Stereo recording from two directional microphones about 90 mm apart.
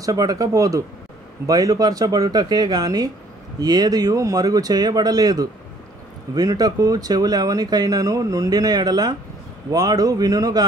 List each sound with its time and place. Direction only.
0.0 s speech: 40° right (ahead or behind)